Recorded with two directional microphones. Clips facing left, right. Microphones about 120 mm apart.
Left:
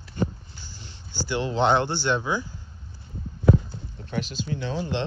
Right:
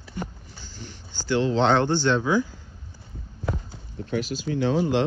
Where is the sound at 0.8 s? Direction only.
20° left (ahead or behind).